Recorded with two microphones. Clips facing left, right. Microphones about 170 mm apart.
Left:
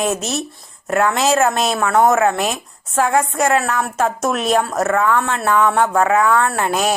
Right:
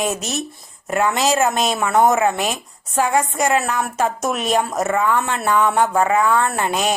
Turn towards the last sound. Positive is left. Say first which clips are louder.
# left 2 dB
turn(degrees=0)  # may be behind; listen again after turning